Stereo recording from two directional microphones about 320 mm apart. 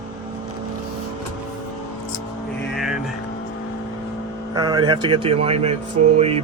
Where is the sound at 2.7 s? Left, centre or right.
Centre.